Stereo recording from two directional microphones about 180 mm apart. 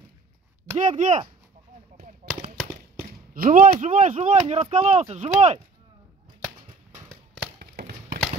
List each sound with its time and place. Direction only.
0.7 s speech: 40° right (ahead or behind)
2.2 s gunshot: 45° right (ahead or behind)
3.1 s speech: 50° right (ahead or behind)
7.5 s a sound: 60° right (ahead or behind)